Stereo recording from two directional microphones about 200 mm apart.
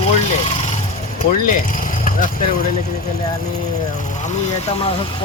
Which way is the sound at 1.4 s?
40° left (ahead or behind).